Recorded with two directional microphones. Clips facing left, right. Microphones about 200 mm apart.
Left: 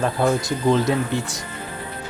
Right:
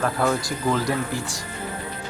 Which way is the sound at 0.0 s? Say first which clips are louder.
Left 3 dB; 20° left (ahead or behind).